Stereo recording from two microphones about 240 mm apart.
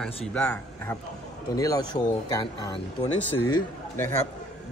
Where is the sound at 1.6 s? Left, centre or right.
Centre.